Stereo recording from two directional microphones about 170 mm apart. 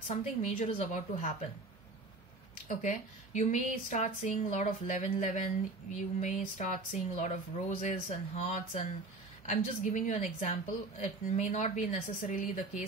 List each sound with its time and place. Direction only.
0.1 s a woman's voice: 45° left (ahead or behind)
2.7 s a woman's voice: 45° left (ahead or behind)